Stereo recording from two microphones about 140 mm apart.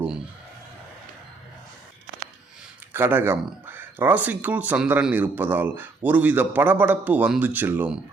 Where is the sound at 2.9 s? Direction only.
15° right (ahead or behind).